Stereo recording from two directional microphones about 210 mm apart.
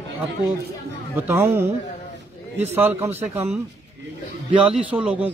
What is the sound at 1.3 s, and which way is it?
A man's voice, 10° right (ahead or behind).